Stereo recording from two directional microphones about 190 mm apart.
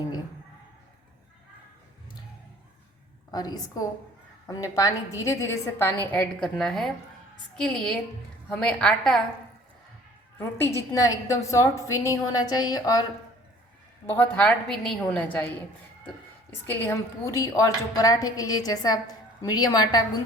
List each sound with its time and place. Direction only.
3.3 s a woman's voice: 20° left (ahead or behind); by 9.2 s 5° left (ahead or behind)
10.3 s a woman's voice: 15° left (ahead or behind)
14.1 s a woman's voice: 10° left (ahead or behind)
16.6 s a woman's voice: 15° left (ahead or behind)